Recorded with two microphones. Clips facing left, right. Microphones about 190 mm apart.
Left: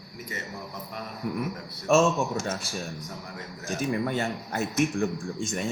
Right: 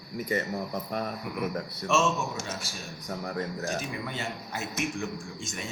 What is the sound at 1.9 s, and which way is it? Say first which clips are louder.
Speech: left 5 dB; 50° left (ahead or behind).